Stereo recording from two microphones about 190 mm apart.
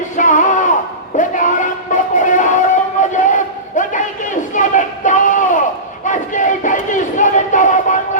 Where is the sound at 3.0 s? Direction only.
40° left (ahead or behind).